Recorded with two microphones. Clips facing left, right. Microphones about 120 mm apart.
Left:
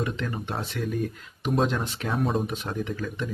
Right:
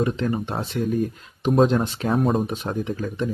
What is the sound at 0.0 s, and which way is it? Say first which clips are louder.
Speech: right 7 dB; 30° right (ahead or behind).